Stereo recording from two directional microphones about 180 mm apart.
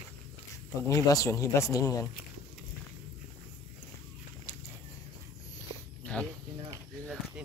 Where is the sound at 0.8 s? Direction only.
20° left (ahead or behind).